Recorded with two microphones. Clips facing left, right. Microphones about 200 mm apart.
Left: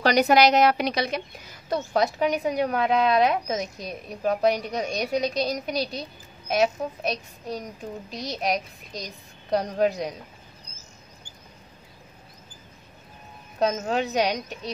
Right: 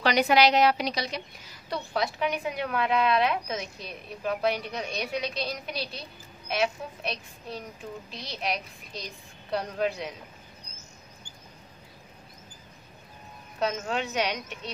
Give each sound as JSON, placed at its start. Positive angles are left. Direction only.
{"t": 0.0, "sound": "a woman's voice", "side_deg": 40}
{"t": 1.7, "sound": "a woman's voice", "side_deg": 45}
{"t": 13.6, "sound": "a woman's voice", "side_deg": 40}